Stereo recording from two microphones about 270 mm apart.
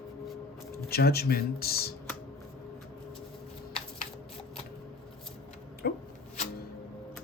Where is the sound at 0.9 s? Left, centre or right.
Left.